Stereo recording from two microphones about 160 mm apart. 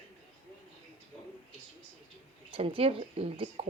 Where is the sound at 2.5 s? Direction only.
35° right (ahead or behind).